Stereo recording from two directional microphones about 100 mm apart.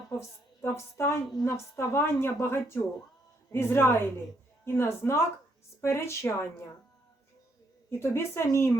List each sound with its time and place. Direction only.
0.1 s a woman's voice: 25° left (ahead or behind)
7.9 s a woman's voice: 25° left (ahead or behind)